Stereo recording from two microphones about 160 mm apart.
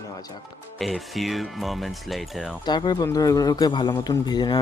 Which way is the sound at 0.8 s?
Centre (ahead or behind).